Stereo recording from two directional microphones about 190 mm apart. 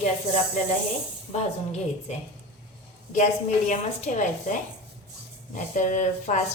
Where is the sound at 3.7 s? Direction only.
40° left (ahead or behind).